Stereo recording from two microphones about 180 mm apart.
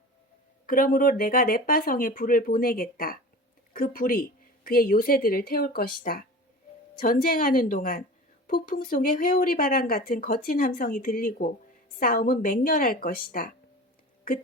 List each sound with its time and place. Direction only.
0.7 s speech: 50° left (ahead or behind)